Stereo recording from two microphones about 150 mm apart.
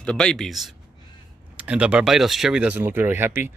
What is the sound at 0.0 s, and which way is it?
Speech, 5° left (ahead or behind).